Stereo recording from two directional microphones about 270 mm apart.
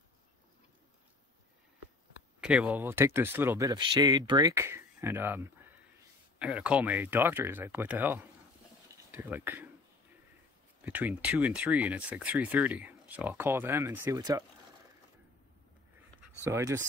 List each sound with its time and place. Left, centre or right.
2.4 s speech: centre
10.8 s speech: centre
16.4 s speech: centre